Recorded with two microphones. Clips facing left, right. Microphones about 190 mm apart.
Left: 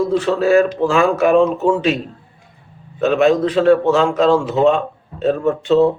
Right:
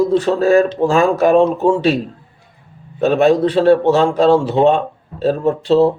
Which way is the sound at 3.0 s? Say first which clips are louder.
Right 1 dB; 35° right (ahead or behind).